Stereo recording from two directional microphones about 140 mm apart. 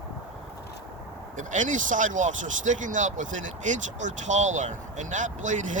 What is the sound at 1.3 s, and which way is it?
Speech, 65° right (ahead or behind).